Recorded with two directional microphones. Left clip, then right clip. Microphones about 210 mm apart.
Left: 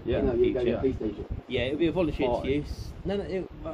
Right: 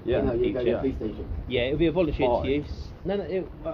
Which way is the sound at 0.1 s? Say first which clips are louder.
Even; 5° right (ahead or behind).